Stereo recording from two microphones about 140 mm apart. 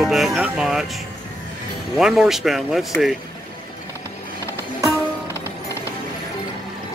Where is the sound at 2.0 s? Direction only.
5° right (ahead or behind).